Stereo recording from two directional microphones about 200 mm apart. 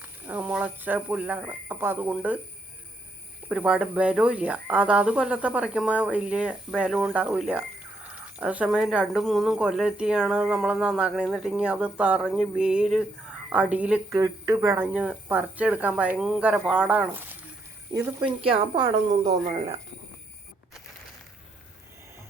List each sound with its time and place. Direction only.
0.0 s speech: 10° right (ahead or behind)
3.5 s speech: 5° right (ahead or behind)
17.9 s speech: 20° right (ahead or behind)